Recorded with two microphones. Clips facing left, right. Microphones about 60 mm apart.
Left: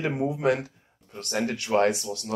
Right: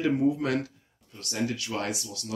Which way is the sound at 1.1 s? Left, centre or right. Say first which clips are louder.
Left 3 dB; left.